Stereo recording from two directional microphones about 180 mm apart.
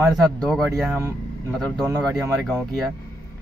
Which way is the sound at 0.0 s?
Centre (ahead or behind).